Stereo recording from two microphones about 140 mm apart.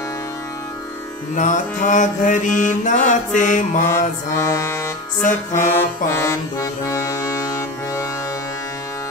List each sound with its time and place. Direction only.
1.3 s mantra: 65° left (ahead or behind)
4.4 s music: 20° left (ahead or behind)